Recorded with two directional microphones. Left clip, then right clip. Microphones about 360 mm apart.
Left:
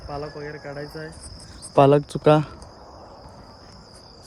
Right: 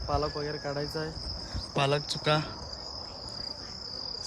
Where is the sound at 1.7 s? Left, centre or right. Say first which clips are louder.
Left 12 dB; centre.